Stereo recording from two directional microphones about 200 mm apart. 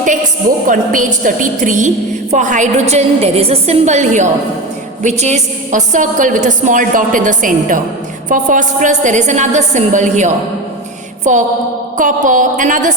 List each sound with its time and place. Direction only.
0.7 s a woman's voice: 40° right (ahead or behind)
11.2 s a sound: 35° right (ahead or behind)
11.9 s a woman's voice: 40° right (ahead or behind)